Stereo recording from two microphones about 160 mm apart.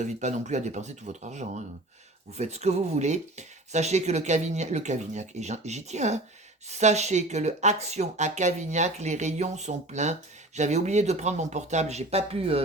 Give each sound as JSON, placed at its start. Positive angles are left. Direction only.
{"t": 0.0, "sound": "speech", "side_deg": -45}